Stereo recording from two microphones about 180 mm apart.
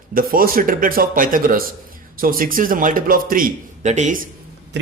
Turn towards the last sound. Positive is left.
turn(degrees=-45)  # may be behind; listen again after turning